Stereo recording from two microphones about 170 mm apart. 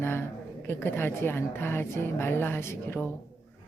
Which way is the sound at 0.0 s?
15° left (ahead or behind).